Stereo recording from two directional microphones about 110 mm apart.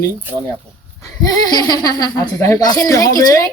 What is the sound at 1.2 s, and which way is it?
Speech, 35° left (ahead or behind).